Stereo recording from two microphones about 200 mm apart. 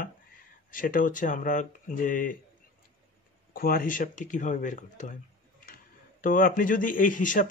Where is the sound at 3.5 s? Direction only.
45° left (ahead or behind).